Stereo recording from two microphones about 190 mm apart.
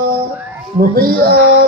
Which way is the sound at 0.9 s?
50° right (ahead or behind).